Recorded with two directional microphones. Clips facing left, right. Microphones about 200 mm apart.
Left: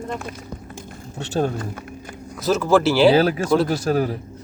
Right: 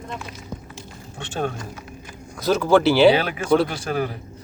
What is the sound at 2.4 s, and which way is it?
Speech, centre (ahead or behind).